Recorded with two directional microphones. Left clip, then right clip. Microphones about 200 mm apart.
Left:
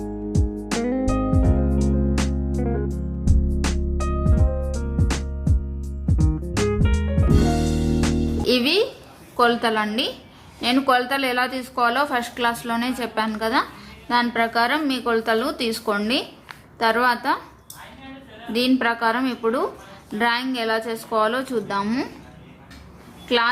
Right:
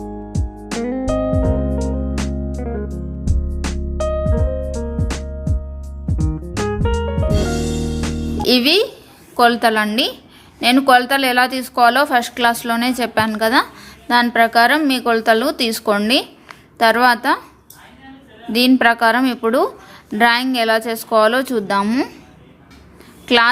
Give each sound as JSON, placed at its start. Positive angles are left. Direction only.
{"t": 0.0, "sound": "music", "side_deg": 0}
{"t": 8.4, "sound": "music", "side_deg": -40}
{"t": 9.3, "sound": "a woman's voice", "side_deg": -40}
{"t": 18.5, "sound": "a woman's voice", "side_deg": -40}
{"t": 23.2, "sound": "speech", "side_deg": -40}